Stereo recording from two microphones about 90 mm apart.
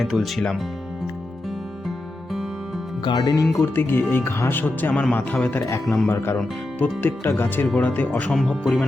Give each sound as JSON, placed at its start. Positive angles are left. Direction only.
{"t": 0.0, "sound": "speech", "side_deg": 0}
{"t": 3.0, "sound": "speech", "side_deg": 55}
{"t": 3.8, "sound": "speech", "side_deg": 25}
{"t": 5.6, "sound": "speech", "side_deg": 35}
{"t": 6.7, "sound": "speech", "side_deg": 20}
{"t": 8.3, "sound": "speech", "side_deg": 0}